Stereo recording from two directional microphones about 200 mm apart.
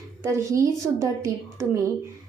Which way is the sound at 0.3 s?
15° right (ahead or behind).